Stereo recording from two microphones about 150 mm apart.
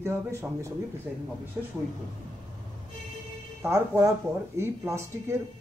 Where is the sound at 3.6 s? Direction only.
20° right (ahead or behind).